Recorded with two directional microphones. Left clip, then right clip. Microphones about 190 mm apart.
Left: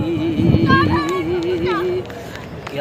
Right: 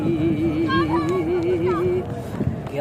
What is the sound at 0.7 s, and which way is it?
Music, 60° right (ahead or behind).